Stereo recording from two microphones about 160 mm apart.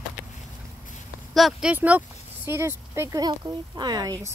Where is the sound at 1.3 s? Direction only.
Centre (ahead or behind); by 4.1 s 25° right (ahead or behind).